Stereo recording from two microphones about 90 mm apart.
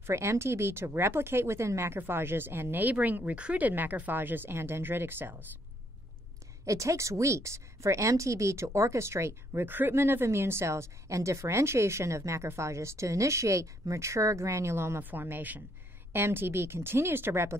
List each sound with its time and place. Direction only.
0.0 s speech: 30° right (ahead or behind)
6.6 s speech: 35° right (ahead or behind)